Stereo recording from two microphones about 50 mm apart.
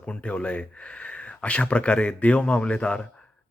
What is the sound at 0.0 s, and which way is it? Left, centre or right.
Speech, left.